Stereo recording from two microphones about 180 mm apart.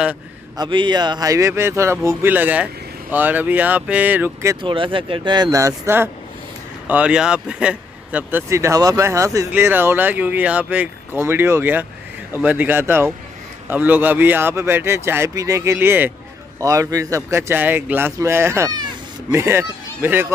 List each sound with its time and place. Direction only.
0.6 s speech: 25° right (ahead or behind)
4.6 s speech: 30° right (ahead or behind); by 20.3 s 10° right (ahead or behind)